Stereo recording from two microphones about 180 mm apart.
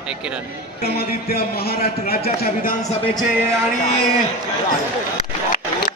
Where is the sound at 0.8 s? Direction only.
60° left (ahead or behind).